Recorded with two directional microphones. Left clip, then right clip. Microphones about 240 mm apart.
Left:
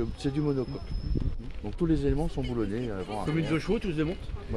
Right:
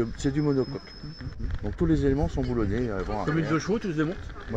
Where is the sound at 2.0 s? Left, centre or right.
Right.